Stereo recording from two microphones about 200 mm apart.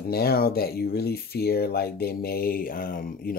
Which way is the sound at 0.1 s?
50° left (ahead or behind).